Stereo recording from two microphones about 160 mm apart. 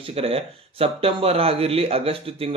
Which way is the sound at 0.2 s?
35° right (ahead or behind).